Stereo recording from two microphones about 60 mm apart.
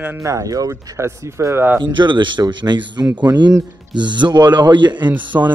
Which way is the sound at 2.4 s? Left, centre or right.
Right.